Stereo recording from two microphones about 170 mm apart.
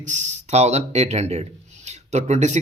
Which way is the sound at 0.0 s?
45° right (ahead or behind).